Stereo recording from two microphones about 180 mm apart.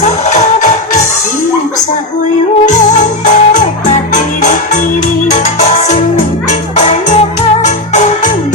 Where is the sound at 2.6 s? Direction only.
45° left (ahead or behind).